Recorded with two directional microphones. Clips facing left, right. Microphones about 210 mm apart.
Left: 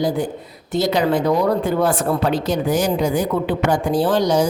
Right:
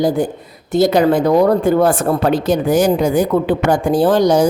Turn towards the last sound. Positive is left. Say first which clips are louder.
# right 4 dB
turn(degrees=-50)  # may be behind; listen again after turning